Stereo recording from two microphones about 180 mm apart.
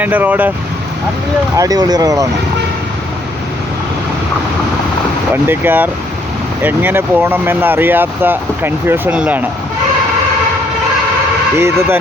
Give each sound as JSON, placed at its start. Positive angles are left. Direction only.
{"t": 0.0, "sound": "speech", "side_deg": -10}
{"t": 1.5, "sound": "speech", "side_deg": -20}
{"t": 5.3, "sound": "speech", "side_deg": -10}
{"t": 11.5, "sound": "speech", "side_deg": -15}